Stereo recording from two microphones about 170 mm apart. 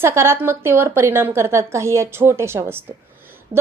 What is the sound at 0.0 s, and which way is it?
A woman's voice, 15° right (ahead or behind).